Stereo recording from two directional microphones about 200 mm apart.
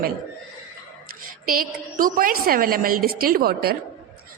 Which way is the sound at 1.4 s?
45° right (ahead or behind).